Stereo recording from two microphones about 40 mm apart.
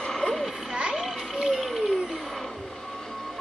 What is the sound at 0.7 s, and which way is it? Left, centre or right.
Vehicle, right.